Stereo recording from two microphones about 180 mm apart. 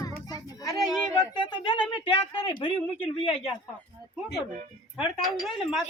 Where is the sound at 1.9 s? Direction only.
25° left (ahead or behind).